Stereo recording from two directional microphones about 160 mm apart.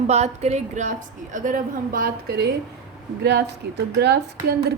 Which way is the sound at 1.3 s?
55° right (ahead or behind).